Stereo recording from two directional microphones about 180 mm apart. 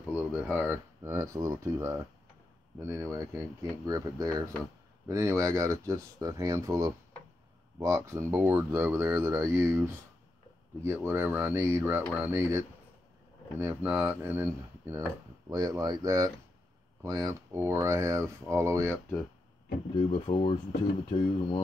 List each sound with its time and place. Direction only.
0.2 s speech: 10° right (ahead or behind)
20.1 s speech: 35° left (ahead or behind)